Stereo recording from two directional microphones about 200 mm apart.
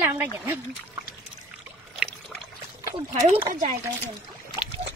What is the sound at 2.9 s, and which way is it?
Speech, 25° right (ahead or behind).